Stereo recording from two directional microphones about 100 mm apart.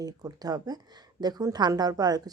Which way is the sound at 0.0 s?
40° right (ahead or behind).